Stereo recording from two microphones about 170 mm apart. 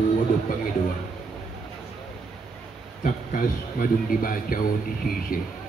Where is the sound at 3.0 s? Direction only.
55° left (ahead or behind).